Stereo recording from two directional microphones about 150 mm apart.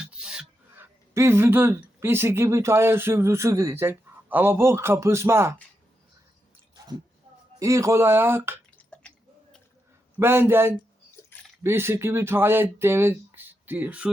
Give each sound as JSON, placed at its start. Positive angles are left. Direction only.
{"t": 0.0, "sound": "a sound", "side_deg": -5}
{"t": 1.1, "sound": "speech", "side_deg": -15}
{"t": 7.6, "sound": "speech", "side_deg": -20}
{"t": 8.8, "sound": "drip", "side_deg": 5}
{"t": 10.2, "sound": "speech", "side_deg": -15}